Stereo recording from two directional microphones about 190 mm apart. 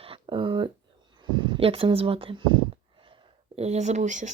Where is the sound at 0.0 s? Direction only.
25° right (ahead or behind).